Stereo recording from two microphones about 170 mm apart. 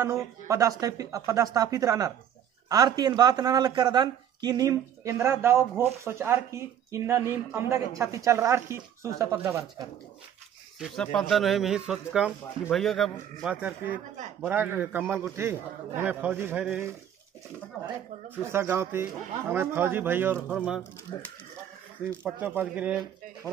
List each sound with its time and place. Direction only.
0.0 s speech: 15° right (ahead or behind)
10.8 s speech: centre (ahead or behind)
18.4 s speech: 15° right (ahead or behind)
21.1 s speech: 20° left (ahead or behind)
22.0 s speech: 15° right (ahead or behind)